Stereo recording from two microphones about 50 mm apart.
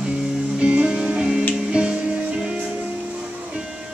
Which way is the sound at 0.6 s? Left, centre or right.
Right.